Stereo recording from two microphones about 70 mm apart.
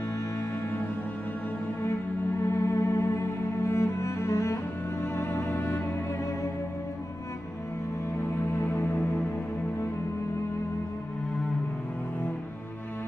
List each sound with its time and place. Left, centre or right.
2.5 s music: left
3.6 s cello: left
5.0 s music: left
8.6 s music: left